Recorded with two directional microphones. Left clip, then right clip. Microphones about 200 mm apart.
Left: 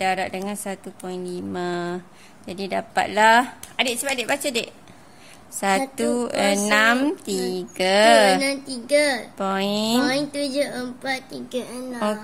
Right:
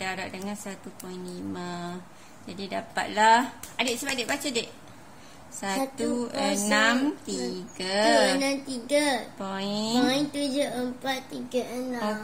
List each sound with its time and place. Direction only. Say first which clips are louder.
0.0 s a woman's voice: left 10 dB; 45° left (ahead or behind)